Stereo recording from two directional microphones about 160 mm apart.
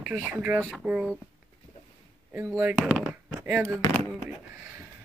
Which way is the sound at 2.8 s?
5° right (ahead or behind).